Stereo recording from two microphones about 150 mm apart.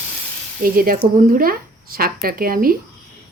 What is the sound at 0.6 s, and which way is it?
Speech, 70° right (ahead or behind).